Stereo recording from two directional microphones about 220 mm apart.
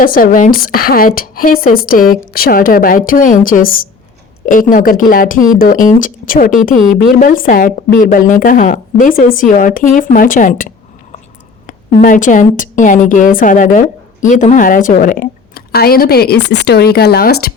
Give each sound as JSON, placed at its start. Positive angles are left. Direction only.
{"t": 0.0, "sound": "a woman's voice", "side_deg": 40}